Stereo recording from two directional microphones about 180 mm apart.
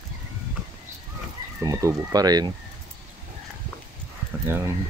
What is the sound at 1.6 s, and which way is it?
Speech, 20° right (ahead or behind).